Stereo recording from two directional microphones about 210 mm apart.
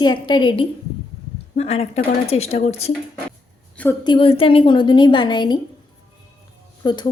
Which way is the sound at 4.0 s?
25° left (ahead or behind).